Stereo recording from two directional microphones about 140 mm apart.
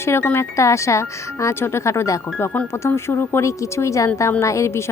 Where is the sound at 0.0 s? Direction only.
15° left (ahead or behind).